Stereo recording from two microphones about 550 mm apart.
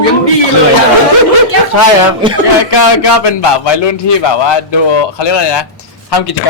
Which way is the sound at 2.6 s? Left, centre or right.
Left.